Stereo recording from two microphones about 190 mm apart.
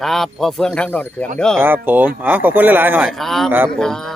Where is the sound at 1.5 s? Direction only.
10° right (ahead or behind).